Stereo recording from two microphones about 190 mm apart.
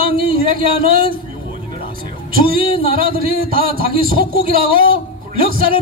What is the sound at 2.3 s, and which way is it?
A man's voice, 50° right (ahead or behind).